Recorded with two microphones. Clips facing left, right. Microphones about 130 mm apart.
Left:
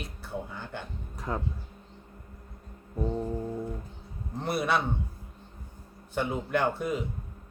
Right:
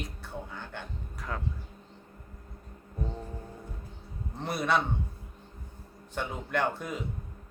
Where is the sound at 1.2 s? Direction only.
25° left (ahead or behind).